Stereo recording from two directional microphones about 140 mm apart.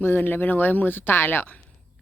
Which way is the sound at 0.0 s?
15° left (ahead or behind).